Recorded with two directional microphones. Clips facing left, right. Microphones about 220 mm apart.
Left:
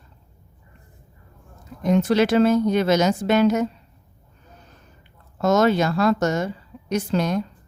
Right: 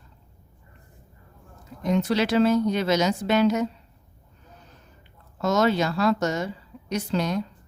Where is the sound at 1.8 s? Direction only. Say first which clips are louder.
Left 5 dB; 50° left (ahead or behind).